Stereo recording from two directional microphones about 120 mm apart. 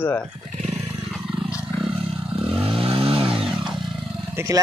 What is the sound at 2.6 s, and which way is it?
Vehicle, 50° right (ahead or behind).